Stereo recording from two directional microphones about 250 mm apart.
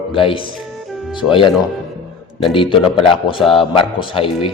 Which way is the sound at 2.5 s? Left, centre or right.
Left.